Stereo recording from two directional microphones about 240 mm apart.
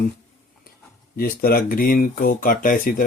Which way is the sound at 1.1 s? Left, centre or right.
Left.